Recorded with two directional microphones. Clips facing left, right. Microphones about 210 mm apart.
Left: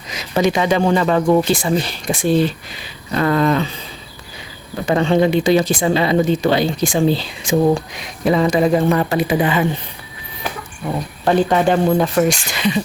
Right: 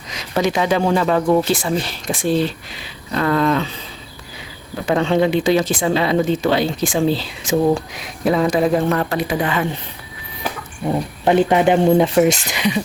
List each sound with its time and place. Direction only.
0.1 s speech: 5° left (ahead or behind)
4.9 s speech: centre (ahead or behind)
11.3 s speech: 20° right (ahead or behind)